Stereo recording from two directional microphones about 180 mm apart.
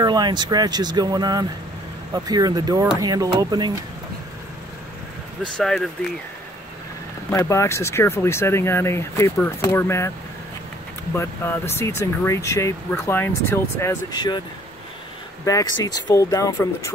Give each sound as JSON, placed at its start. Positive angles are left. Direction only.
{"t": 0.0, "sound": "speech", "side_deg": -25}
{"t": 5.6, "sound": "speech", "side_deg": 0}
{"t": 7.2, "sound": "speech", "side_deg": 15}
{"t": 11.1, "sound": "speech", "side_deg": 15}
{"t": 15.4, "sound": "speech", "side_deg": 20}